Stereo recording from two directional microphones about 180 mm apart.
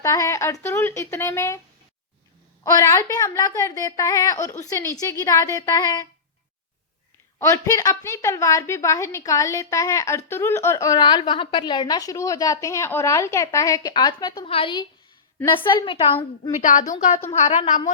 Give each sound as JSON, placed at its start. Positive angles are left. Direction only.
{"t": 0.0, "sound": "a woman's voice", "side_deg": 15}
{"t": 2.7, "sound": "a woman's voice", "side_deg": 20}
{"t": 7.3, "sound": "a woman's voice", "side_deg": 15}
{"t": 16.5, "sound": "a woman's voice", "side_deg": 45}